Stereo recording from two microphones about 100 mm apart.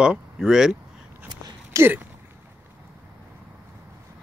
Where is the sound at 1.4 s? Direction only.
30° right (ahead or behind).